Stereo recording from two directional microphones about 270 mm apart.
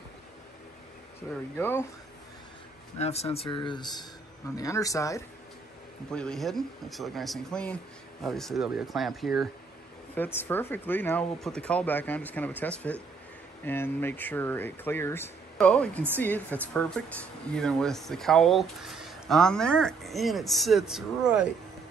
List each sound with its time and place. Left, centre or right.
1.6 s speech: centre
3.0 s speech: left; by 21.5 s centre